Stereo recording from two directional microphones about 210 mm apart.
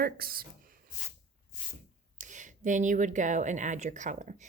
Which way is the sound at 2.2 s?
35° right (ahead or behind).